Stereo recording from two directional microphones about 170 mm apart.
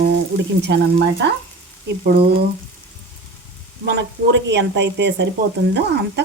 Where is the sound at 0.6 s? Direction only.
80° right.